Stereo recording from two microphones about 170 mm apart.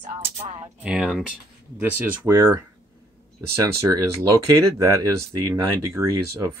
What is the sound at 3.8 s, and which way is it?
Speech, 15° right (ahead or behind).